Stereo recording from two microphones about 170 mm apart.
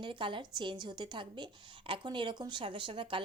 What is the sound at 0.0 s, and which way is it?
Speech, 30° right (ahead or behind).